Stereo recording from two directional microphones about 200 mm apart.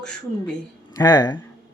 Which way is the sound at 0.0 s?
5° left (ahead or behind).